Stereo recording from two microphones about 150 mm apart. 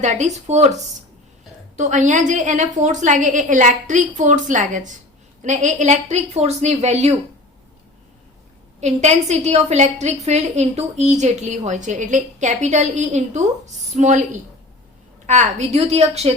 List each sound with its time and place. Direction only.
0.0 s a woman's voice: 50° right (ahead or behind)
1.7 s a woman's voice: 55° right (ahead or behind)
8.8 s a woman's voice: 50° right (ahead or behind)
15.3 s a woman's voice: 50° right (ahead or behind)